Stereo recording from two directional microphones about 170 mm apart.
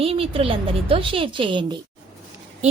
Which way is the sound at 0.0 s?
35° right (ahead or behind).